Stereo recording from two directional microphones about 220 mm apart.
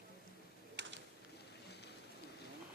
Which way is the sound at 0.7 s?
55° right (ahead or behind).